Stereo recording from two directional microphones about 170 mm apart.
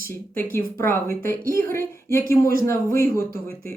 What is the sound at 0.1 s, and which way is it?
Speech, 15° left (ahead or behind).